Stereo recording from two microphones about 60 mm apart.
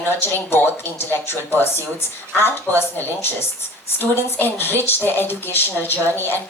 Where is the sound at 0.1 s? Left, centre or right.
Left.